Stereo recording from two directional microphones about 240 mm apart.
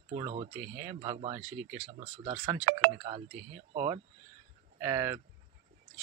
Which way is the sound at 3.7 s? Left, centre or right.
Right.